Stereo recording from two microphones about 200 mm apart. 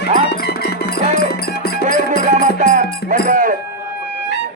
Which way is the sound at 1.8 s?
40° right (ahead or behind).